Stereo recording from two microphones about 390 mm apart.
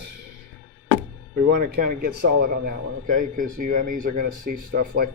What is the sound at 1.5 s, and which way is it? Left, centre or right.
Speech, right.